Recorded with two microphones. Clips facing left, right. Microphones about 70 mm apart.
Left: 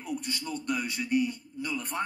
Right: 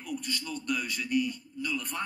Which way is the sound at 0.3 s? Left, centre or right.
Left.